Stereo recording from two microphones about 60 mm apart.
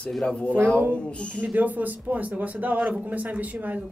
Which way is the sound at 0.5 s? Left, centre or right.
Right.